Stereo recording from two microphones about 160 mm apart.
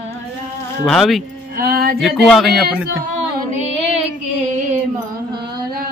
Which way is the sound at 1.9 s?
Centre (ahead or behind).